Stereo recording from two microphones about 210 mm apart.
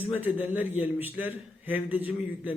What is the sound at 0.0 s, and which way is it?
A man's voice, 10° right (ahead or behind).